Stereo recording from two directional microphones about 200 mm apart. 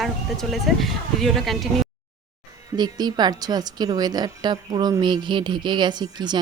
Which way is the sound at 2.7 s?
20° right (ahead or behind).